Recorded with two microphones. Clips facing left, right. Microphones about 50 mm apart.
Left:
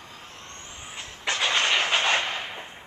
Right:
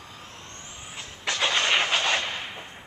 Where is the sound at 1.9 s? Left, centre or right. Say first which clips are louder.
Left 2 dB; centre.